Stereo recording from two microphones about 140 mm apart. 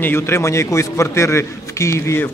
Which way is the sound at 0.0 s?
15° left (ahead or behind).